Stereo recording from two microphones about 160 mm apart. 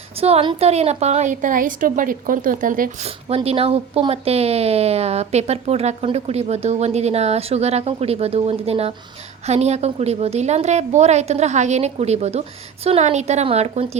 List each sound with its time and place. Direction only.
0.2 s a woman's voice: 40° right (ahead or behind); by 2.9 s 55° right (ahead or behind)
3.0 s a woman's voice: 40° right (ahead or behind)